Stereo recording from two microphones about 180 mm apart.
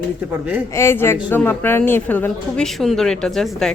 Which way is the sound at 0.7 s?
15° left (ahead or behind).